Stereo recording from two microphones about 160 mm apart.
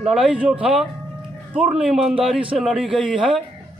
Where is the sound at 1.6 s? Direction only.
5° right (ahead or behind).